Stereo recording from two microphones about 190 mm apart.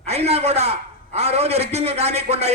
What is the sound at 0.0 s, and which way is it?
A man's voice, 35° right (ahead or behind).